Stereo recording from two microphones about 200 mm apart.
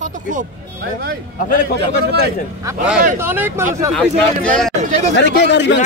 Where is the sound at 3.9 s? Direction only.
Centre (ahead or behind).